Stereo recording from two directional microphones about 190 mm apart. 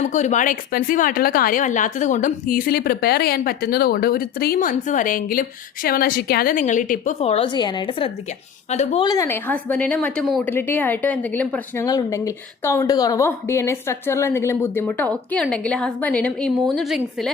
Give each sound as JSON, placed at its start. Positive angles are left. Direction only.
{"t": 0.0, "sound": "a woman's voice", "side_deg": 40}
{"t": 9.0, "sound": "a woman's voice", "side_deg": 15}
{"t": 11.9, "sound": "a woman's voice", "side_deg": 20}